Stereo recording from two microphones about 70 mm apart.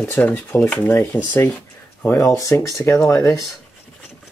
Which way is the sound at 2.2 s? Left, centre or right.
Left.